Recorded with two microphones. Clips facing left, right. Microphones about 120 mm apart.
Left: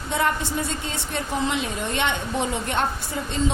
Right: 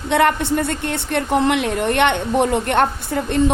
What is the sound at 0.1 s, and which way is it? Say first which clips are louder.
A woman's voice: right 8 dB; 65° right (ahead or behind).